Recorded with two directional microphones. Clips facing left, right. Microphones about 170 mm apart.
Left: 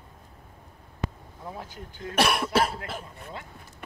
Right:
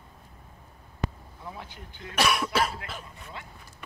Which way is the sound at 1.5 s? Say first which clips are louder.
Left 4 dB; 45° left (ahead or behind).